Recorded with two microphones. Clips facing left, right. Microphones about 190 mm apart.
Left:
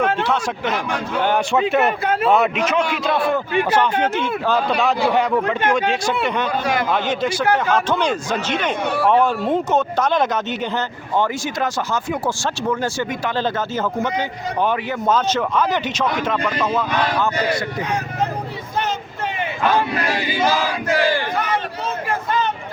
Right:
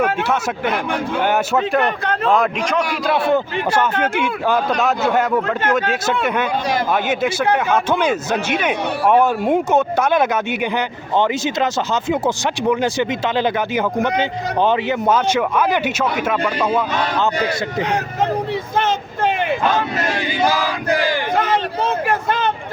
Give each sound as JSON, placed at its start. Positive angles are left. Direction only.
{"t": 0.0, "sound": "a man's voice", "side_deg": -5}
{"t": 1.5, "sound": "a man's voice", "side_deg": 0}
{"t": 4.1, "sound": "a man's voice", "side_deg": -10}
{"t": 10.8, "sound": "a man's voice", "side_deg": -20}
{"t": 14.6, "sound": "speech", "side_deg": -25}
{"t": 15.0, "sound": "a man's voice", "side_deg": -10}
{"t": 18.9, "sound": "a sound", "side_deg": -75}
{"t": 21.3, "sound": "a sound", "side_deg": -60}